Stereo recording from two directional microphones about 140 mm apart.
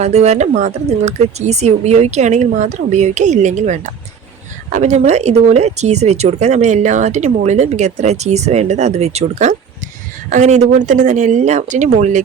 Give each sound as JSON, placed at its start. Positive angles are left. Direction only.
{"t": 0.0, "sound": "speech", "side_deg": -50}